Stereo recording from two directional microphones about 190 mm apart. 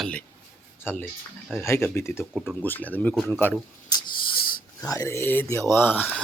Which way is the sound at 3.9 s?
20° left (ahead or behind).